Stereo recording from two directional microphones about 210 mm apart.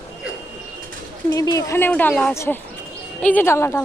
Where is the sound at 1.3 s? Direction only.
15° left (ahead or behind).